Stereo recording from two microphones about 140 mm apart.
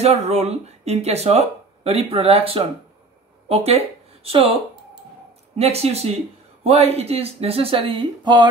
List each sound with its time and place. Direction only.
0.0 s speech: 50° right (ahead or behind)
5.6 s speech: 45° right (ahead or behind)